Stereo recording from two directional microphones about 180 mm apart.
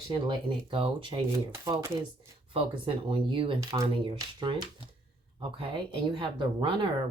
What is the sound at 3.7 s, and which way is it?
Speech, 20° right (ahead or behind).